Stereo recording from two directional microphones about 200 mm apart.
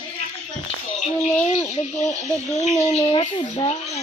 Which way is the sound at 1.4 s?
30° left (ahead or behind).